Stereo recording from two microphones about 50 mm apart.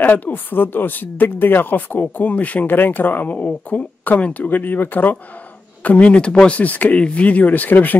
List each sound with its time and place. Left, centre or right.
0.0 s speech: left
5.9 s speech: left